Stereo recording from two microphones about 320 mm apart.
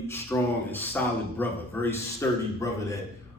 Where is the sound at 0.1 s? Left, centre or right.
Centre.